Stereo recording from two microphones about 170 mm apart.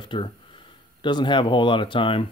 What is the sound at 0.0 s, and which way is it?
Speech, 30° left (ahead or behind).